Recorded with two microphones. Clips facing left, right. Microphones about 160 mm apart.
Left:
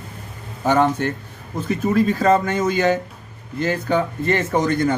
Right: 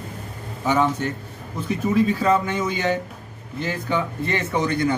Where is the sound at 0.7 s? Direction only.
50° left (ahead or behind).